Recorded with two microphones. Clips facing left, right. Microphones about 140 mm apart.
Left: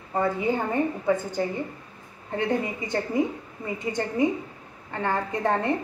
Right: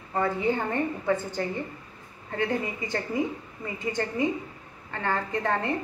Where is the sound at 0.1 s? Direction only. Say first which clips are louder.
Left 1 dB; 15° left (ahead or behind).